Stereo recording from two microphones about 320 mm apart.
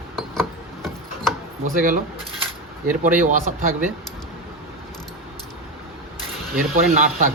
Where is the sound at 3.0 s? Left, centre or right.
Right.